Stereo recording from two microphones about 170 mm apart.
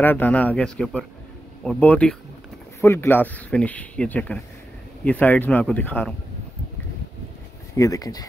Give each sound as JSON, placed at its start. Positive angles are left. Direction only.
{"t": 0.0, "sound": "speech", "side_deg": 10}
{"t": 7.7, "sound": "speech", "side_deg": 20}